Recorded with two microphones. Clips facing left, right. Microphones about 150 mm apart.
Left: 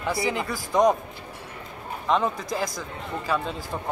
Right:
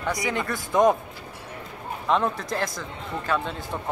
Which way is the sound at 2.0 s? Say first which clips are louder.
Even; centre (ahead or behind).